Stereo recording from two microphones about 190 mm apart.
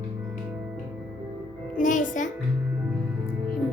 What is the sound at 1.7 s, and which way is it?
Speech, 45° left (ahead or behind).